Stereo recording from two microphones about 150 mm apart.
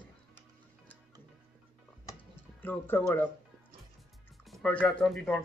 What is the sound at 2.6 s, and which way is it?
Speech, 15° left (ahead or behind).